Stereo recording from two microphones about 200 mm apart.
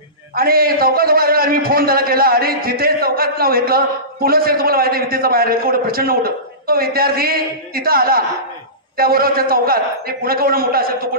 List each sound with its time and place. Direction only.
0.4 s a man's voice: 50° right (ahead or behind)